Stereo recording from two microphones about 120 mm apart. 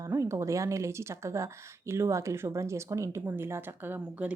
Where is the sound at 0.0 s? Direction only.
30° right (ahead or behind).